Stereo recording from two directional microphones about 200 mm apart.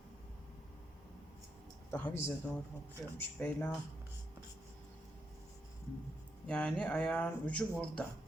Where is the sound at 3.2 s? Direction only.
5° left (ahead or behind).